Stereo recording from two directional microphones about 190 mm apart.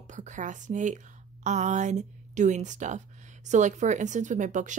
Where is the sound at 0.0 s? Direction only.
40° right (ahead or behind).